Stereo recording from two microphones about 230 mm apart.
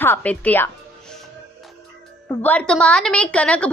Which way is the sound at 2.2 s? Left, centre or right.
Centre.